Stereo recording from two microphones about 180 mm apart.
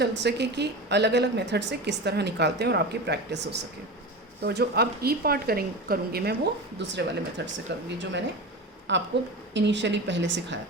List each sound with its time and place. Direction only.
0.2 s a woman's voice: 70° right (ahead or behind)